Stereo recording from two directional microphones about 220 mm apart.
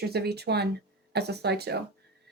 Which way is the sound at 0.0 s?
45° right (ahead or behind).